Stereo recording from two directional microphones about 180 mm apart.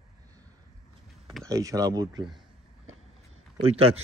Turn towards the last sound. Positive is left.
turn(degrees=-35)  # may be behind; listen again after turning